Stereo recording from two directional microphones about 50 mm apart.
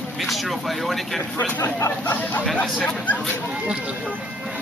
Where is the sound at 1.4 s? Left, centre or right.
Left.